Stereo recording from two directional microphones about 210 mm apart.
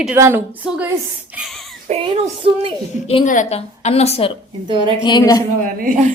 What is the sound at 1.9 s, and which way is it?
Child singing, 35° right (ahead or behind).